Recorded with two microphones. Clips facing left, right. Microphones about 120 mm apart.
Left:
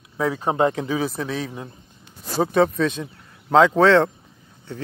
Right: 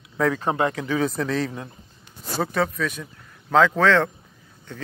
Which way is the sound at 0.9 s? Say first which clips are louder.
Right 1 dB; 5° left (ahead or behind).